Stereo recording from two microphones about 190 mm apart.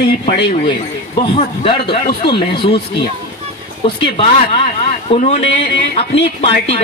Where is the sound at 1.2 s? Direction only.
30° left (ahead or behind).